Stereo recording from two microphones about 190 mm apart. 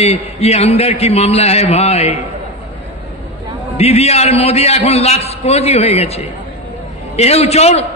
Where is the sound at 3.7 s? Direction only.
35° left (ahead or behind).